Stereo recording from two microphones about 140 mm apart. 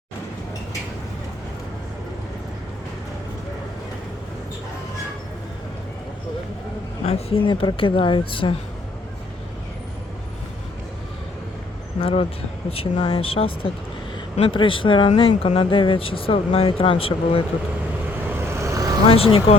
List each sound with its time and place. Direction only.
7.0 s speech: 45° left (ahead or behind)
11.9 s speech: 40° left (ahead or behind)
15.1 s speech: 50° left (ahead or behind)
15.5 s speech: 35° left (ahead or behind)
18.3 s vehicle: 20° right (ahead or behind)
19.0 s speech: 40° left (ahead or behind)